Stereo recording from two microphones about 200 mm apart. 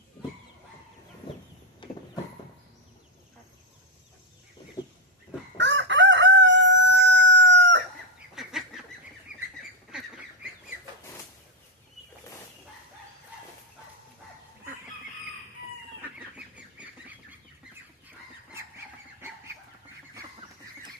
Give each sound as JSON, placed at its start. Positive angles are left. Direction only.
{"t": 5.5, "sound": "crowing", "side_deg": -65}
{"t": 8.4, "sound": "duck", "side_deg": 0}
{"t": 16.7, "sound": "duck", "side_deg": -5}